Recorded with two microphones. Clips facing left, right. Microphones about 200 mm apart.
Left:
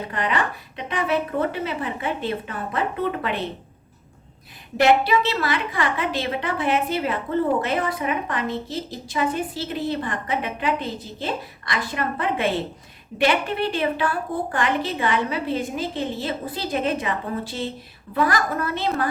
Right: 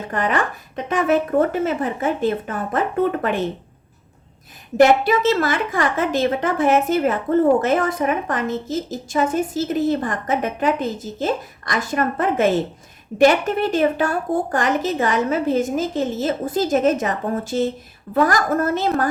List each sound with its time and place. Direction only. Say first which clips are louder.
0.1 s a woman's voice: right 5 dB; 45° right (ahead or behind)
4.8 s a woman's voice: right 4 dB; 45° right (ahead or behind)